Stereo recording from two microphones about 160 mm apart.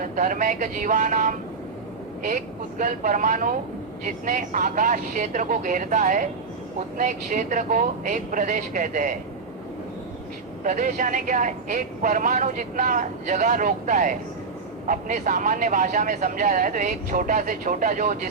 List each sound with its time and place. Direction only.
0.0 s speech: 55° right (ahead or behind)
10.6 s speech: 55° right (ahead or behind)